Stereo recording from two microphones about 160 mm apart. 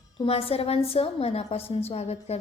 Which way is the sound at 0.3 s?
35° left (ahead or behind).